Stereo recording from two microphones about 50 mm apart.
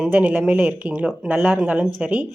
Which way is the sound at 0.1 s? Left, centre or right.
Right.